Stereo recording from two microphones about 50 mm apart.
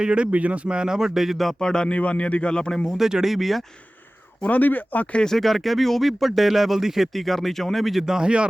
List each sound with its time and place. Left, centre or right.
0.0 s a man's voice: right; by 1.5 s centre
1.5 s a man's voice: centre
3.0 s speech: centre
4.4 s speech: left
5.1 s speech: centre
5.4 s speech: centre
8.0 s a man's voice: centre